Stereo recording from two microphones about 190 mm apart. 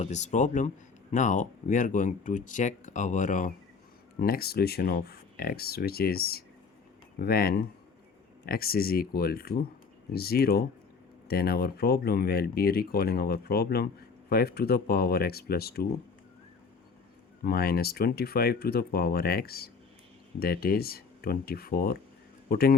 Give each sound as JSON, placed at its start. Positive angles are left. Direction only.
{"t": 0.0, "sound": "speech", "side_deg": 40}
{"t": 17.4, "sound": "a man's voice", "side_deg": 50}